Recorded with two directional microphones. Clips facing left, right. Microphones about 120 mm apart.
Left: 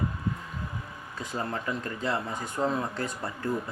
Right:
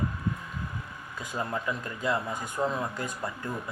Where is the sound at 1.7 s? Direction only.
30° left (ahead or behind).